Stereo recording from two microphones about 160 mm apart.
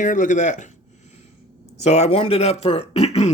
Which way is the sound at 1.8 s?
45° left (ahead or behind).